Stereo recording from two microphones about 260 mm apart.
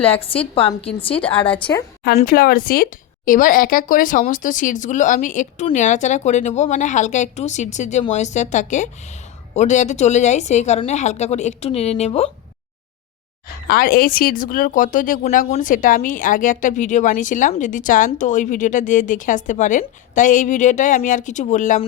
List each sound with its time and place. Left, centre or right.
0.0 s speech: left
1.1 s a woman's voice: centre
2.1 s speech: left
13.7 s speech: left